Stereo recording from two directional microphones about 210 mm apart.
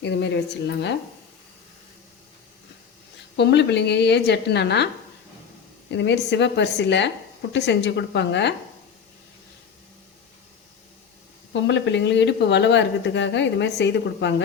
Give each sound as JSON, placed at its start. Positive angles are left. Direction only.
{"t": 0.0, "sound": "speech", "side_deg": 55}
{"t": 3.3, "sound": "a woman's voice", "side_deg": 55}
{"t": 5.9, "sound": "speech", "side_deg": 55}
{"t": 11.5, "sound": "speech", "side_deg": 55}